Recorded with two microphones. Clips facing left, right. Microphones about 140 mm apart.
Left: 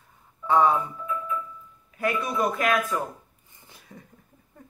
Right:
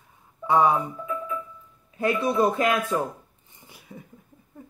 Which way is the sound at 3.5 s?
10° right (ahead or behind).